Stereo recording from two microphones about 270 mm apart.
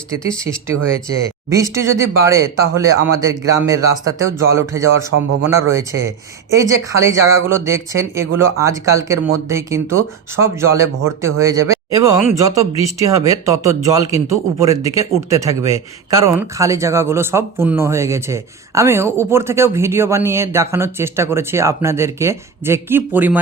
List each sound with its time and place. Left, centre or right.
1.5 s speech: centre
5.1 s speech: right
5.5 s speech: centre